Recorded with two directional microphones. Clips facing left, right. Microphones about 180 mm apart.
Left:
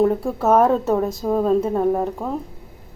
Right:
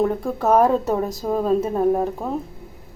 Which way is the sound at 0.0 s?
5° left (ahead or behind).